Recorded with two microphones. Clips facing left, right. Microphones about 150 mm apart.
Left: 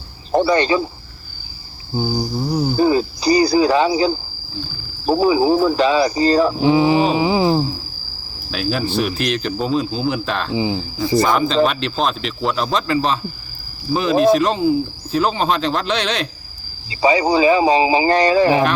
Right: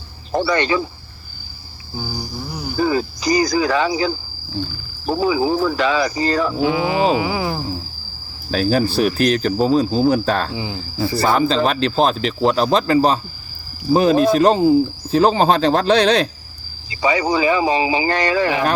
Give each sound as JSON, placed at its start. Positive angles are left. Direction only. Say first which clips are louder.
{"t": 0.3, "sound": "speech", "louder": "left 3 dB", "side_deg": 35}
{"t": 2.0, "sound": "speech", "louder": "left 8 dB", "side_deg": 30}
{"t": 8.4, "sound": "speech", "louder": "right 4 dB", "side_deg": -40}
{"t": 10.5, "sound": "speech", "louder": "left 7 dB", "side_deg": 20}
{"t": 11.2, "sound": "speech", "louder": "even", "side_deg": -35}
{"t": 16.9, "sound": "speech", "louder": "left 3 dB", "side_deg": 30}